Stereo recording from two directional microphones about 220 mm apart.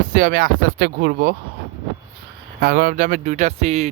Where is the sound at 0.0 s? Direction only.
40° right (ahead or behind).